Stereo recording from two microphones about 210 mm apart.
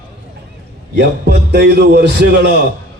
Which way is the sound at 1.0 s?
50° right (ahead or behind).